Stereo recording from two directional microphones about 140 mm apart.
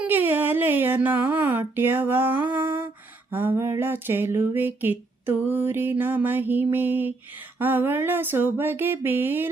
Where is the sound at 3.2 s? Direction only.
15° right (ahead or behind).